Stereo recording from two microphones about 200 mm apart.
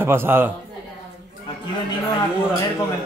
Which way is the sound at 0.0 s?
10° right (ahead or behind).